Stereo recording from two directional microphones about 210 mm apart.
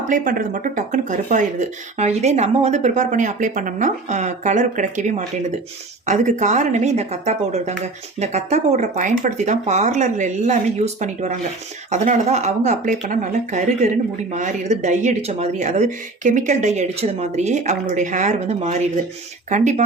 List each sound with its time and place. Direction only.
0.1 s speech: 40° right (ahead or behind)